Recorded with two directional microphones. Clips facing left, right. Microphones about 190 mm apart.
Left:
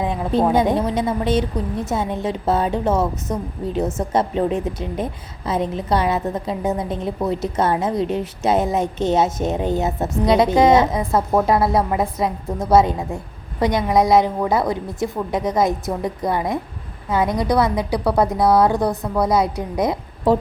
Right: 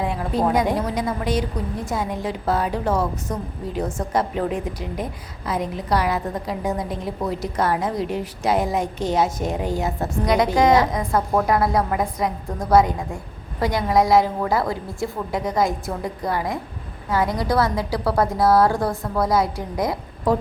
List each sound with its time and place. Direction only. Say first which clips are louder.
0.0 s a woman's voice: left 3 dB; 20° left (ahead or behind)